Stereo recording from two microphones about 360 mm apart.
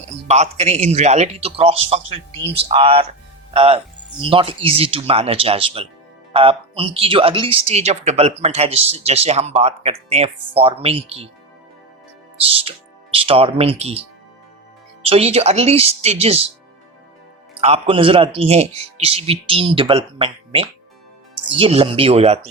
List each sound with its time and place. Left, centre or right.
0.1 s speech: centre
12.4 s speech: centre
15.0 s speech: centre
17.6 s speech: centre